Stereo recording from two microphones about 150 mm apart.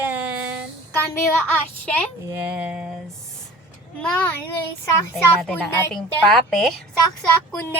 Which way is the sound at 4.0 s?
10° left (ahead or behind).